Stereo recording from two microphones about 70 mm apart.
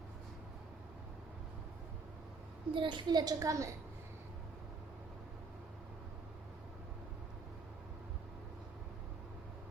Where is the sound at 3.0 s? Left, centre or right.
Right.